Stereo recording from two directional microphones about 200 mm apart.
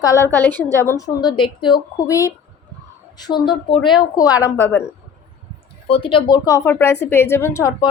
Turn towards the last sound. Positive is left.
turn(degrees=15)  # may be behind; listen again after turning